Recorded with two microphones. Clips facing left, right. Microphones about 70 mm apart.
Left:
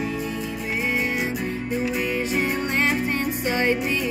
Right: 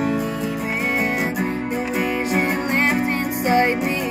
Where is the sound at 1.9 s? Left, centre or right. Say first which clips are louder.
Right 3 dB; right.